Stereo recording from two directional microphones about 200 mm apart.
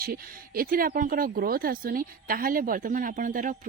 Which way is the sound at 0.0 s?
45° right (ahead or behind).